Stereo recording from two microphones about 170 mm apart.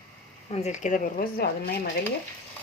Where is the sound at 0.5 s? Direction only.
40° left (ahead or behind).